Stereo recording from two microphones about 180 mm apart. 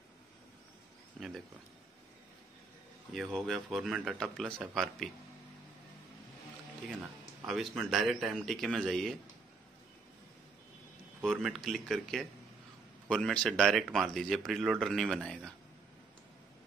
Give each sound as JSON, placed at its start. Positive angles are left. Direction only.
{"t": 1.2, "sound": "a sound", "side_deg": 5}
{"t": 3.1, "sound": "speech", "side_deg": 0}
{"t": 6.9, "sound": "speech", "side_deg": 0}
{"t": 11.1, "sound": "speech", "side_deg": 0}